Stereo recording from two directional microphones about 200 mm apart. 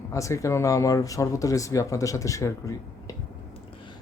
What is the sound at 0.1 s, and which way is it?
Speech, 15° left (ahead or behind).